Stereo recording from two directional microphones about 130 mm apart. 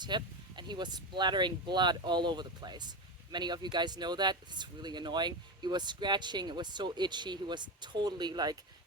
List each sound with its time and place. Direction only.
0.0 s speech: 35° right (ahead or behind)